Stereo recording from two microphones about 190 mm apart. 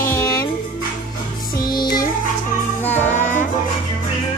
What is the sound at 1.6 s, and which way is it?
Music, 20° left (ahead or behind).